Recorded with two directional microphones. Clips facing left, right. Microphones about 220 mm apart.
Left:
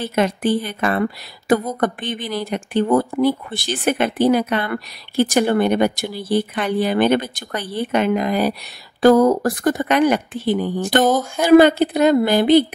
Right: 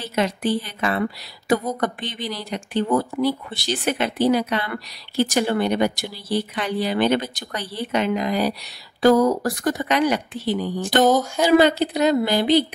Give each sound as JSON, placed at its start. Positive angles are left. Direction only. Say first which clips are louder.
{"t": 0.0, "sound": "speech", "louder": "left 4 dB", "side_deg": 50}